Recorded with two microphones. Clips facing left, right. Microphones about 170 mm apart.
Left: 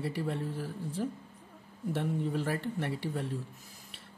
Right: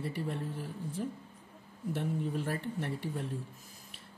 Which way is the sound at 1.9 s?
80° left.